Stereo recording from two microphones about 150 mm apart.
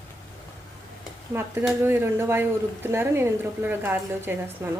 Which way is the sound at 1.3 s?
15° right (ahead or behind).